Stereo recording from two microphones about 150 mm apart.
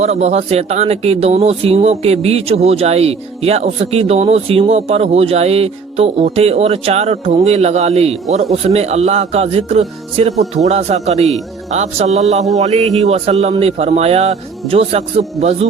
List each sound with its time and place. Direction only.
0.0 s speech: 45° right (ahead or behind)